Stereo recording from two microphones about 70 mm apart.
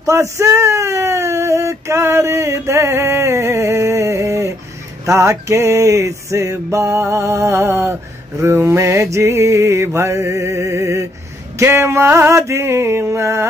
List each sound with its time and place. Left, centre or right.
0.0 s speech: right
5.0 s music: right
11.5 s a sound: right